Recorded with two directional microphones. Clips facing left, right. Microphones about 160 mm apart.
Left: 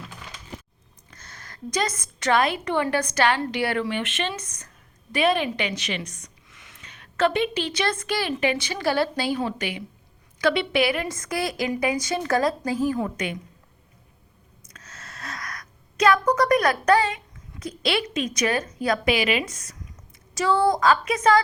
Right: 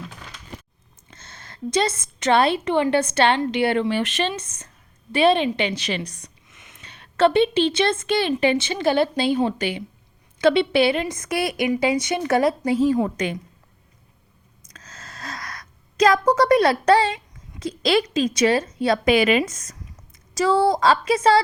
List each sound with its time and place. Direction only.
1.1 s a woman's voice: 25° right (ahead or behind)
6.5 s a sound: 20° right (ahead or behind)
6.8 s a woman's voice: 30° right (ahead or behind)
14.8 s a sound: 35° right (ahead or behind)
17.6 s a woman's voice: 35° right (ahead or behind)
19.0 s a woman's voice: 45° right (ahead or behind)
20.3 s a woman's voice: 35° right (ahead or behind)